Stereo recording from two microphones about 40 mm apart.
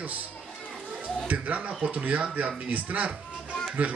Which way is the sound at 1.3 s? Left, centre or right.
Right.